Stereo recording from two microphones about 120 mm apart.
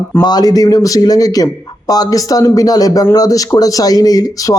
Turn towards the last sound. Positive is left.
turn(degrees=30)  # may be behind; listen again after turning